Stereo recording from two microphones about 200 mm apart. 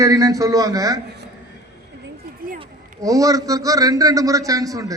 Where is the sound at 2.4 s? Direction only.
45° right (ahead or behind).